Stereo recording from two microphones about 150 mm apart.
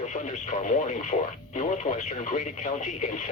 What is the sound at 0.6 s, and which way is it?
Speech, 55° left (ahead or behind).